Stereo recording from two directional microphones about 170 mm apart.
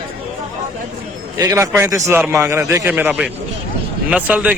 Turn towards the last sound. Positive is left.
turn(degrees=-10)  # may be behind; listen again after turning